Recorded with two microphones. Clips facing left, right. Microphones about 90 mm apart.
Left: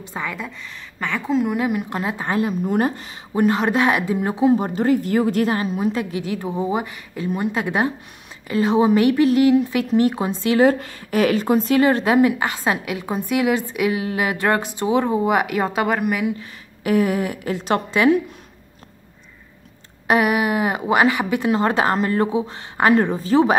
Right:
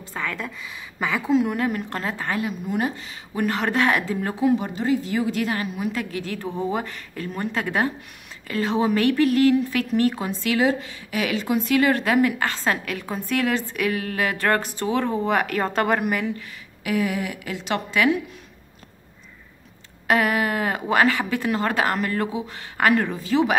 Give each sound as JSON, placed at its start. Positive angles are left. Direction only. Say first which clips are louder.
{"t": 0.0, "sound": "a woman's voice", "louder": "left 1 dB", "side_deg": 15}
{"t": 0.5, "sound": "a woman's voice", "louder": "even", "side_deg": -5}
{"t": 2.3, "sound": "a woman's voice", "louder": "left 9 dB", "side_deg": 40}
{"t": 3.3, "sound": "a woman's voice", "louder": "left 5 dB", "side_deg": 20}
{"t": 4.6, "sound": "a woman's voice", "louder": "left 5 dB", "side_deg": 45}
{"t": 10.6, "sound": "a woman's voice", "louder": "left 7 dB", "side_deg": 50}
{"t": 16.8, "sound": "a woman's voice", "louder": "left 5 dB", "side_deg": 35}
{"t": 20.1, "sound": "a woman's voice", "louder": "left 3 dB", "side_deg": 15}
{"t": 23.1, "sound": "a woman's voice", "louder": "left 5 dB", "side_deg": 40}